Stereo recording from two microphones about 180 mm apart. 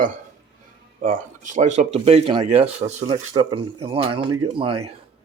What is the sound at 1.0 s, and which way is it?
Speech, 45° right (ahead or behind).